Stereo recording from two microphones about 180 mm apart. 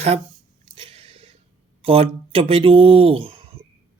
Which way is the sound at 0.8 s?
30° right (ahead or behind).